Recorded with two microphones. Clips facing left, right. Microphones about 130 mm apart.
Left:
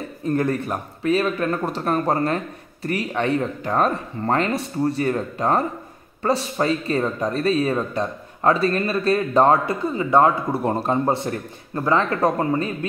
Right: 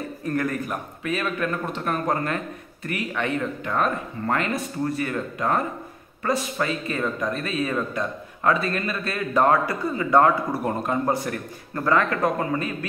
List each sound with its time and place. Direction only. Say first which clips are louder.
0.2 s a man's voice: left 5 dB; 25° left (ahead or behind)